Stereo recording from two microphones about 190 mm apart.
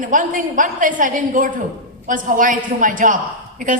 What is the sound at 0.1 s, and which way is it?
A woman's voice, 45° right (ahead or behind).